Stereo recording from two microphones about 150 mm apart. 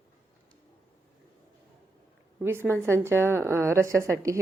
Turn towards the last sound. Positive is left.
turn(degrees=-20)  # may be behind; listen again after turning